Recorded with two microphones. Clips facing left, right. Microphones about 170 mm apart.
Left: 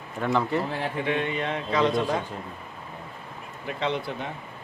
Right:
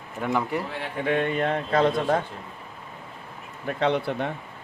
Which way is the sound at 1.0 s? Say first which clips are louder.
Right 6 dB; 50° right (ahead or behind).